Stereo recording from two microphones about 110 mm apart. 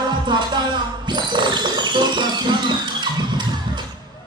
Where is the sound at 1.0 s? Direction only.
45° right (ahead or behind).